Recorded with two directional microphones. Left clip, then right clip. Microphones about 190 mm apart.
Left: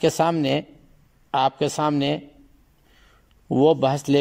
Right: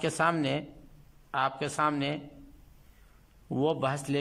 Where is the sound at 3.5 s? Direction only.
20° left (ahead or behind).